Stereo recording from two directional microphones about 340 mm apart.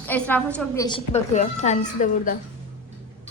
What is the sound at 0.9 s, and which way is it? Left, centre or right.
A woman's voice, centre.